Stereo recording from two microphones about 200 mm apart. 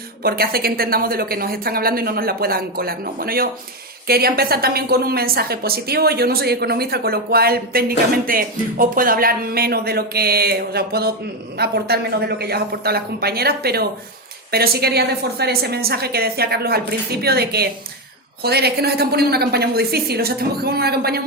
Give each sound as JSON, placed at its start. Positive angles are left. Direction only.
{"t": 0.2, "sound": "a woman's voice", "side_deg": -50}